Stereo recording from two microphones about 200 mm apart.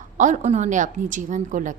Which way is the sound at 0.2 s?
35° right (ahead or behind).